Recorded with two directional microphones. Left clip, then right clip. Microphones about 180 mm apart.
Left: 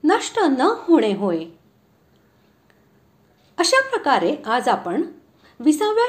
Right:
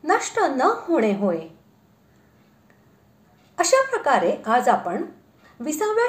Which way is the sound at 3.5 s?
25° left (ahead or behind).